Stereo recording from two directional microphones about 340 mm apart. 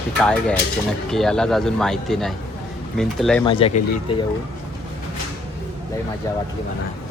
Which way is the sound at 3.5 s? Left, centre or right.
Centre.